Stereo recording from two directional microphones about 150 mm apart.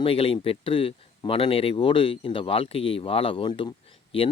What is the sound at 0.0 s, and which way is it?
Speech, 40° left (ahead or behind).